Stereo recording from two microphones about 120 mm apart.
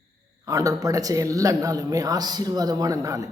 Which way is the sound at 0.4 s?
30° right (ahead or behind).